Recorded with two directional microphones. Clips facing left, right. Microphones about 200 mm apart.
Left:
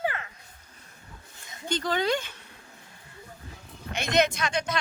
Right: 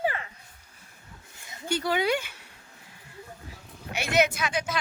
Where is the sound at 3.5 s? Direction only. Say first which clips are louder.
Even; 10° right (ahead or behind).